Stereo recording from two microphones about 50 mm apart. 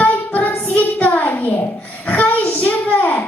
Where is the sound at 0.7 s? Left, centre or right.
Left.